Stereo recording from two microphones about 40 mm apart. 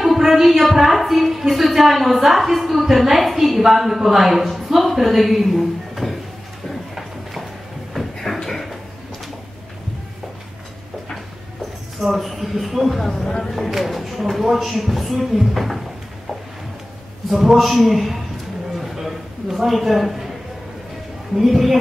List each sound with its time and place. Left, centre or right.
0.0 s a woman's voice: centre
7.9 s a sound: centre
12.2 s speech: centre
17.3 s speech: centre
18.8 s a sound: centre
21.4 s speech: centre